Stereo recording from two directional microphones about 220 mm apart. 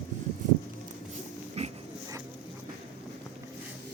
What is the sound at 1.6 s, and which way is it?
Pig, 30° right (ahead or behind).